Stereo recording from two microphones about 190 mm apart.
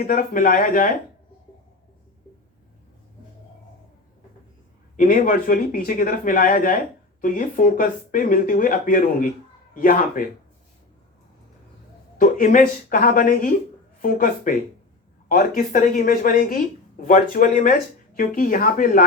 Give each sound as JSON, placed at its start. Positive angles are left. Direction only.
{"t": 0.0, "sound": "speech", "side_deg": 45}
{"t": 4.9, "sound": "speech", "side_deg": 50}
{"t": 12.1, "sound": "speech", "side_deg": 45}